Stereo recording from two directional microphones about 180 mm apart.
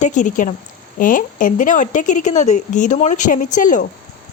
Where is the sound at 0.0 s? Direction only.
45° left (ahead or behind).